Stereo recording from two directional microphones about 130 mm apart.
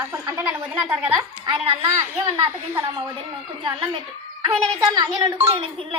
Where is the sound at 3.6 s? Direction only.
40° right (ahead or behind).